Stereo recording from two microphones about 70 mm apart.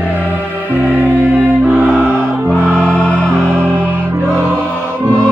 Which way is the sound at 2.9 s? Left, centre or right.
Centre.